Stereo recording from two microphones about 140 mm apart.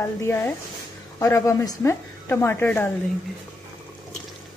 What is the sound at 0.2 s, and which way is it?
Speech, 20° left (ahead or behind).